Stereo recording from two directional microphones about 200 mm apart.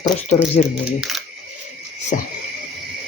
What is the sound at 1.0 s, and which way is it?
Speech, centre (ahead or behind).